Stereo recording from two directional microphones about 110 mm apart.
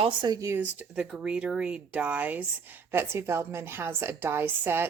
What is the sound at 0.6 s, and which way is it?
A woman's voice, 10° right (ahead or behind).